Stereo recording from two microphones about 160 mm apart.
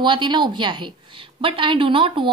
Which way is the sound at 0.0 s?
30° right (ahead or behind).